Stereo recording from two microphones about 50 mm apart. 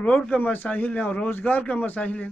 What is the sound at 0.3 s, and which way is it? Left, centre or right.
Speech, left.